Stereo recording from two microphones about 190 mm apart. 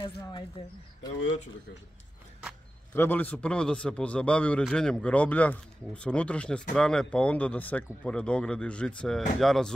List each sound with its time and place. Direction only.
0.2 s speech: 25° left (ahead or behind)
2.9 s speech: 10° left (ahead or behind)